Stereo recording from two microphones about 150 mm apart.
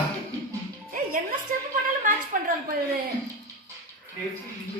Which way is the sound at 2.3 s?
65° right (ahead or behind).